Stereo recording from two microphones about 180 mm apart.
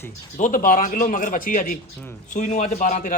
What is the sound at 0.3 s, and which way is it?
A man's voice, 45° left (ahead or behind).